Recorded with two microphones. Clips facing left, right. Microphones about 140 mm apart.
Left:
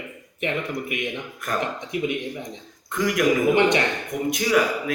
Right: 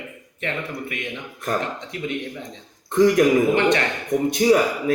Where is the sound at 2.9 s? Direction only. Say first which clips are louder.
Right 8 dB; 35° right (ahead or behind).